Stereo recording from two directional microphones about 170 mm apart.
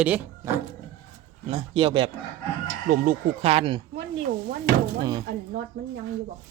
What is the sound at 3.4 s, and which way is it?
Speech, 35° right (ahead or behind).